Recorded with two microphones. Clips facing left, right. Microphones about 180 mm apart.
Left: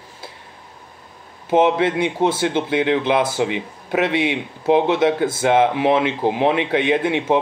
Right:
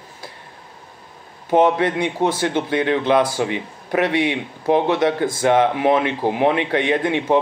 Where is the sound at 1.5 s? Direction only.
20° left (ahead or behind).